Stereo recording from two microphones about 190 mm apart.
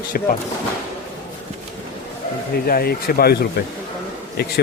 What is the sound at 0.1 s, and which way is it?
Speech, 50° left (ahead or behind).